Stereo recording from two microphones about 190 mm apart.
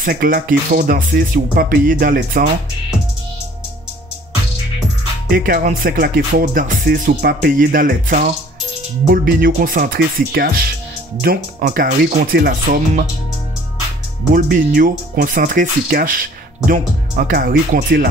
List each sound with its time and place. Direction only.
0.0 s speech: 50° right (ahead or behind)
5.3 s speech: 45° right (ahead or behind)
14.3 s speech: 45° right (ahead or behind)